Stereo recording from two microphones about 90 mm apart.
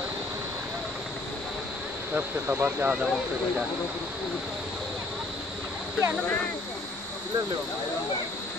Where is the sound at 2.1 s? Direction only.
20° right (ahead or behind).